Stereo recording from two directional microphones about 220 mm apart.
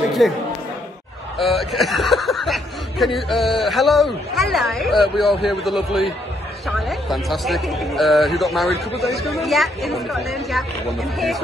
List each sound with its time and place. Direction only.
0.2 s a woman's voice: centre (ahead or behind)
1.4 s a woman's voice: centre (ahead or behind)